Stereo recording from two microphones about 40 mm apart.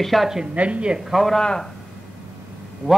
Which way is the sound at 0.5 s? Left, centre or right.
Right.